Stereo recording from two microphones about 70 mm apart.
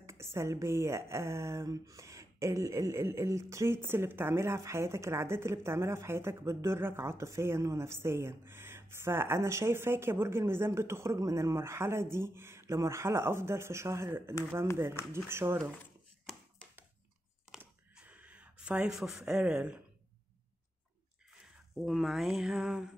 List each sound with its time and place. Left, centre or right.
0.0 s speech: right
17.9 s a sound: right
21.7 s speech: centre